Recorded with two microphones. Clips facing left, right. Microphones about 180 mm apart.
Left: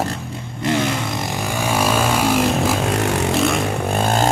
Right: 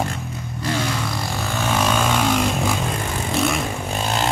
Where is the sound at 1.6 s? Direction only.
10° left (ahead or behind).